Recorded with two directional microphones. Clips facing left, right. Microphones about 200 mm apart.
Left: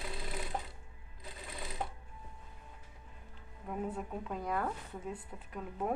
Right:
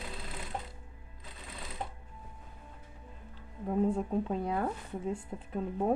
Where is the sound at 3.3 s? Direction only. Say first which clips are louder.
Right 9 dB; 30° right (ahead or behind).